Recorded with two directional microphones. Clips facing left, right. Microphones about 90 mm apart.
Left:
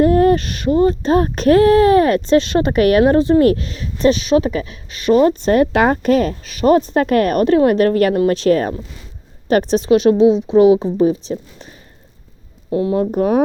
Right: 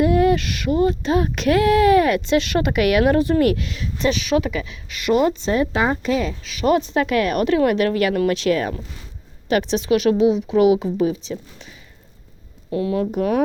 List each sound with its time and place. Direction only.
0.0 s speech: 40° left (ahead or behind)
12.7 s speech: 30° left (ahead or behind)